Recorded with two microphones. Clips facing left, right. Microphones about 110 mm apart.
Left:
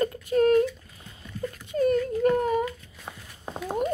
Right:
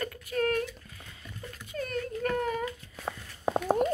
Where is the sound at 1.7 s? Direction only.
25° left (ahead or behind).